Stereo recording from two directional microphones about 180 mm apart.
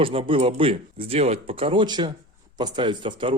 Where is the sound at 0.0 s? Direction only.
30° right (ahead or behind).